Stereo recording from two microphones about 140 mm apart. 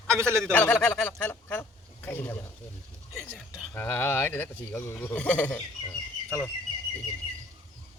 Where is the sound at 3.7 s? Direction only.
15° left (ahead or behind).